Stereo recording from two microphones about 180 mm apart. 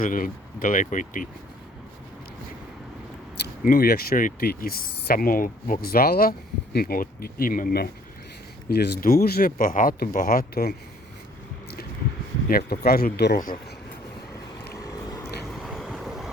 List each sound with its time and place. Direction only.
0.0 s speech: 50° left (ahead or behind)
3.3 s speech: 60° left (ahead or behind)
12.5 s speech: 50° left (ahead or behind)
15.5 s vehicle: centre (ahead or behind)